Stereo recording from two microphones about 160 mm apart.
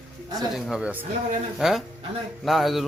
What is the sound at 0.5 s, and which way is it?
A man's voice, 5° right (ahead or behind).